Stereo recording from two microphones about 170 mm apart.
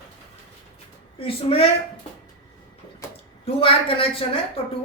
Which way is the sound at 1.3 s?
35° left (ahead or behind).